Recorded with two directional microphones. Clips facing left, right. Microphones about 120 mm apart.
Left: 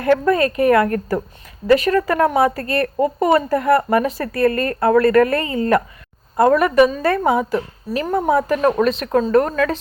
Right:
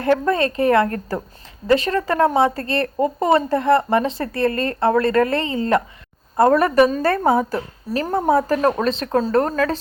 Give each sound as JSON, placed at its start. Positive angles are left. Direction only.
{"t": 0.0, "sound": "a woman's voice", "side_deg": -30}